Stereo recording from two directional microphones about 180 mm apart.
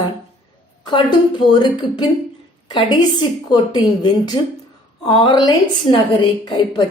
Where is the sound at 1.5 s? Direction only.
25° left (ahead or behind).